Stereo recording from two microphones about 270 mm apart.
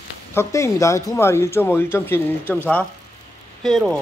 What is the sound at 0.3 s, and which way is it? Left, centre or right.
Speech, centre.